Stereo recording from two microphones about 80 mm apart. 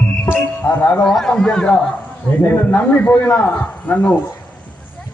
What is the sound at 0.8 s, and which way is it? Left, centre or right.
Speech, left.